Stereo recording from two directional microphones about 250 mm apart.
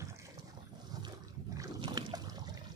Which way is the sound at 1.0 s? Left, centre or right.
Centre.